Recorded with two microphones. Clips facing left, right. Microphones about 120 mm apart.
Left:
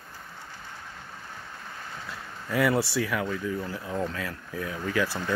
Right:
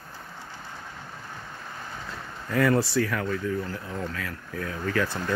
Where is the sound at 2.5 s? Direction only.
10° left (ahead or behind).